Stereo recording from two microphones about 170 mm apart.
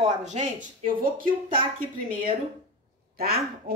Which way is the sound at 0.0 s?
40° right (ahead or behind).